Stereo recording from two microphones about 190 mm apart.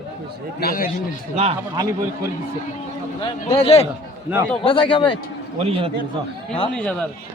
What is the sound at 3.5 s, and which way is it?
A man's voice, 30° left (ahead or behind).